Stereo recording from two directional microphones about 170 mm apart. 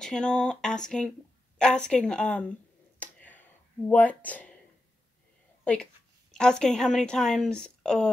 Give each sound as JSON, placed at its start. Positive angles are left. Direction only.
{"t": 0.0, "sound": "speech", "side_deg": 5}
{"t": 3.0, "sound": "a sound", "side_deg": 10}
{"t": 3.9, "sound": "speech", "side_deg": 10}
{"t": 5.6, "sound": "a woman's voice", "side_deg": 10}